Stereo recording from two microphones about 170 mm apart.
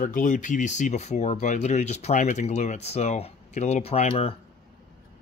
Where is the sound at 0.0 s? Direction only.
50° left (ahead or behind).